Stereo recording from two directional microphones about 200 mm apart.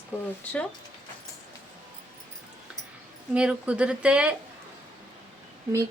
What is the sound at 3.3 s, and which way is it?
Speech, 5° right (ahead or behind).